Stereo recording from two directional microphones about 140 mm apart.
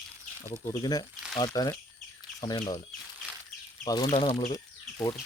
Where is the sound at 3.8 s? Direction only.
30° left (ahead or behind).